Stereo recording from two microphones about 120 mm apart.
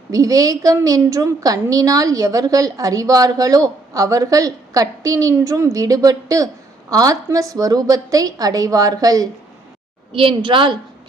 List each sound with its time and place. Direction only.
0.1 s a woman's voice: 30° right (ahead or behind)
10.1 s a woman's voice: 45° right (ahead or behind)